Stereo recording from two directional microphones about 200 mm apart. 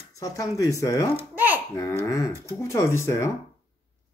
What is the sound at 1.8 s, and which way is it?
Speech, 15° left (ahead or behind).